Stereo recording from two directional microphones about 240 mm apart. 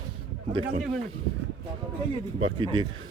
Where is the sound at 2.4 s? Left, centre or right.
Right.